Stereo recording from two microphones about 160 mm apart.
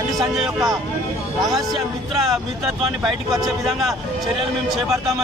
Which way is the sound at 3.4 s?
Centre (ahead or behind).